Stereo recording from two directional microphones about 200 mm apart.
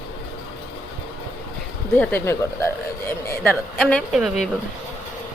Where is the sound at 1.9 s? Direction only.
10° left (ahead or behind).